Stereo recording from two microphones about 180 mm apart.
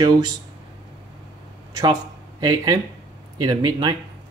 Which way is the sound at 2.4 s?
20° right (ahead or behind).